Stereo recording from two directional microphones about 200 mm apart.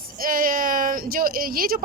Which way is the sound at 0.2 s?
45° right (ahead or behind).